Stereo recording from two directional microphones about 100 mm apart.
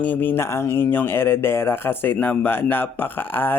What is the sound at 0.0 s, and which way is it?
Speech, 20° left (ahead or behind).